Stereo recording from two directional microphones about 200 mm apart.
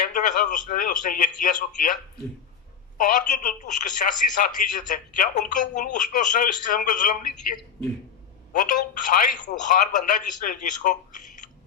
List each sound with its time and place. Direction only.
0.0 s speech: 40° left (ahead or behind)
3.0 s speech: 40° left (ahead or behind)
8.5 s speech: 40° left (ahead or behind)